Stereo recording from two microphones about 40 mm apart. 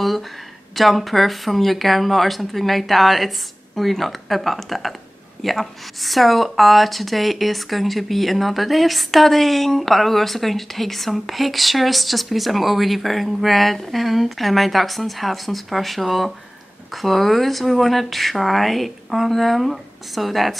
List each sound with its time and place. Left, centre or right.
0.7 s speech: centre